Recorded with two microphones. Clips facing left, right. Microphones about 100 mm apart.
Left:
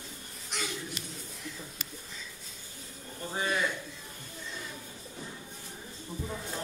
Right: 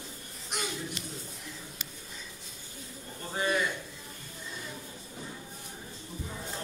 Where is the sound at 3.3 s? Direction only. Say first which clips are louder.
Right 2 dB; centre (ahead or behind).